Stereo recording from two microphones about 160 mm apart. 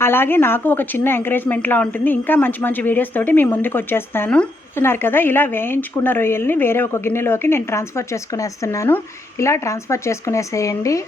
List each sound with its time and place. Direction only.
0.0 s a woman's voice: 15° left (ahead or behind)